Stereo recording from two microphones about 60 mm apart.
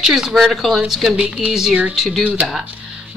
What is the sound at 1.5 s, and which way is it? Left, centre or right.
Speech, centre.